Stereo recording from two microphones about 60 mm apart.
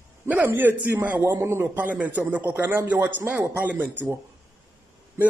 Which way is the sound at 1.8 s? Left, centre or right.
Right.